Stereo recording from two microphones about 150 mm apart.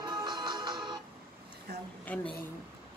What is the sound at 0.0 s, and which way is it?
Music, 30° right (ahead or behind).